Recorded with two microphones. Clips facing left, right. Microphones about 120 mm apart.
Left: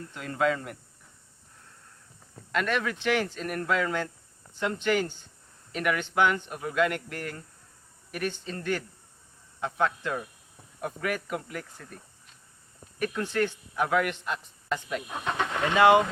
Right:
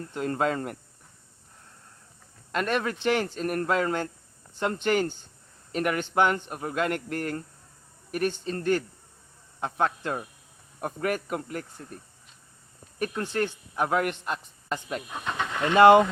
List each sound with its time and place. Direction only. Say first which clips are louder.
0.0 s speech: right 1 dB; 40° right (ahead or behind)
2.5 s speech: right 1 dB; 40° right (ahead or behind)
13.3 s speech: left 1 dB; 35° right (ahead or behind)
15.2 s speech: left 1 dB; 10° left (ahead or behind)
15.7 s speech: right 4 dB; 45° right (ahead or behind)